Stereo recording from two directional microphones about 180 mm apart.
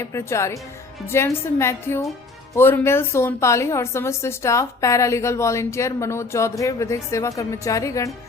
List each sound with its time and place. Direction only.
0.0 s a woman's voice: 15° left (ahead or behind)